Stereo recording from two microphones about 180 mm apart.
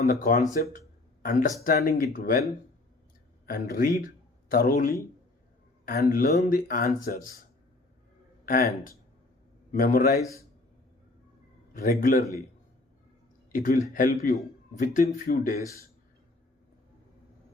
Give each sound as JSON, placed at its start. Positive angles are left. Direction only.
{"t": 0.2, "sound": "speech", "side_deg": 45}
{"t": 3.4, "sound": "a man's voice", "side_deg": 55}
{"t": 8.4, "sound": "speech", "side_deg": 50}
{"t": 9.7, "sound": "speech", "side_deg": 50}
{"t": 10.2, "sound": "a man's voice", "side_deg": 15}
{"t": 11.7, "sound": "speech", "side_deg": 50}
{"t": 13.5, "sound": "speech", "side_deg": 45}